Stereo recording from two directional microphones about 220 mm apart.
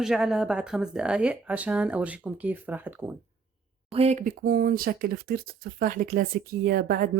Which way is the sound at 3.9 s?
30° right (ahead or behind).